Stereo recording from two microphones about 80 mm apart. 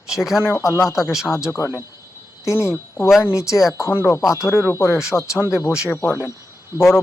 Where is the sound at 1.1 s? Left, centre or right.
Centre.